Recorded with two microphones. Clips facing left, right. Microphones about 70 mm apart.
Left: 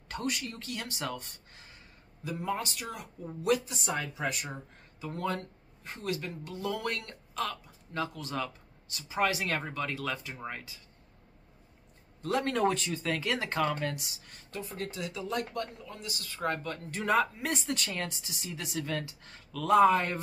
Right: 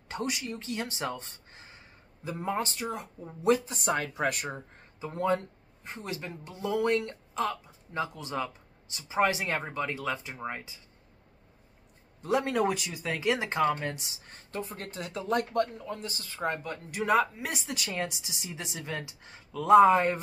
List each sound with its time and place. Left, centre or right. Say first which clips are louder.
0.1 s speech: right 1 dB; centre
3.7 s speech: right 4 dB; right
5.0 s speech: right 5 dB; right
12.2 s speech: right 2 dB; centre
16.5 s speech: right 2 dB; centre